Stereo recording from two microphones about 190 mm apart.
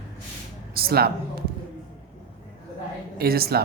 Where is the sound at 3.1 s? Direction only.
55° right (ahead or behind).